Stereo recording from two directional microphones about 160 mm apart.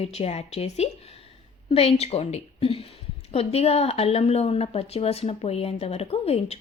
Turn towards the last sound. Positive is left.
turn(degrees=40)  # may be behind; listen again after turning